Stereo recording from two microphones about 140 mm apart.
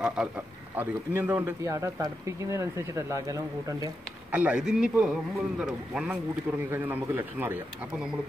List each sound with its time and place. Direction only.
0.0 s speech: 5° right (ahead or behind)
0.7 s speech: 15° right (ahead or behind)
4.3 s speech: 10° right (ahead or behind)
6.7 s speech: 15° right (ahead or behind)